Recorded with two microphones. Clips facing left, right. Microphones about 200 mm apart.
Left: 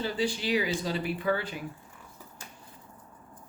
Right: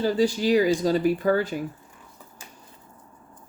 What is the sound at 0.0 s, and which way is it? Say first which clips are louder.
Speech: right 8 dB; 40° right (ahead or behind).